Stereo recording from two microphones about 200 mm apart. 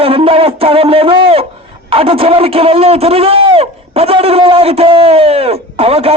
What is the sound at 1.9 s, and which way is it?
A man's voice, 30° right (ahead or behind).